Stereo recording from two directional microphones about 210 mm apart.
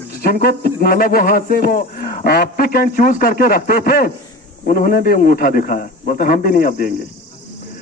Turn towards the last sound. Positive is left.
turn(degrees=40)  # may be behind; listen again after turning